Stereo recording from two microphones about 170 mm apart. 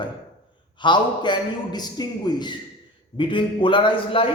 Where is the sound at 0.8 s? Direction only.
25° left (ahead or behind).